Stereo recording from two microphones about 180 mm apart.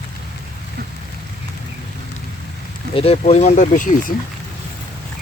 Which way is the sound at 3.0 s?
35° left (ahead or behind).